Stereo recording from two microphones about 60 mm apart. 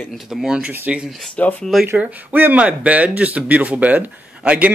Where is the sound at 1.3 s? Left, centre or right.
Left.